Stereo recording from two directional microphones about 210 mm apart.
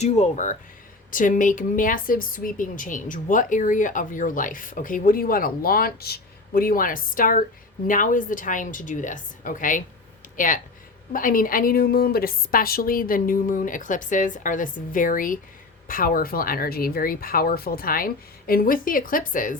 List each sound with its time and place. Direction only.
0.0 s speech: 35° left (ahead or behind)